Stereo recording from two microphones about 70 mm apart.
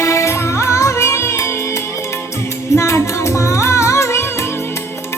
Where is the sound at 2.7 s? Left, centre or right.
Left.